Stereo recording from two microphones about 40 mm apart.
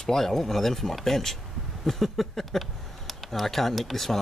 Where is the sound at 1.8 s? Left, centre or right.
Centre.